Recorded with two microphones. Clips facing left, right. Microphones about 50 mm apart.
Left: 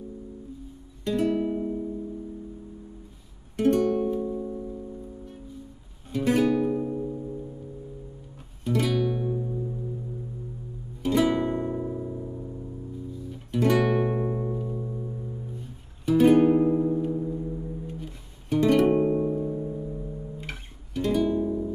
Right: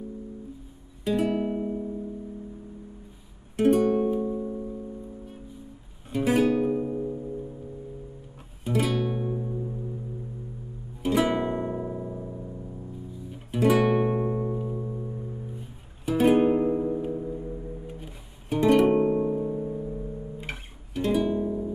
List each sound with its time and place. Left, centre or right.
1.0 s music: centre
1.4 s music: centre
3.5 s music: centre
4.4 s music: centre
6.1 s music: centre
8.6 s music: centre
11.0 s music: centre
16.1 s music: centre